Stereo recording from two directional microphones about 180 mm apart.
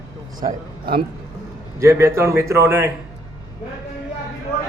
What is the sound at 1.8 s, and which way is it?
Speech, 15° right (ahead or behind).